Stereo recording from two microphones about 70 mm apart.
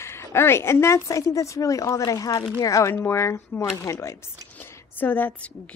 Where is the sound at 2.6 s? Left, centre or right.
Left.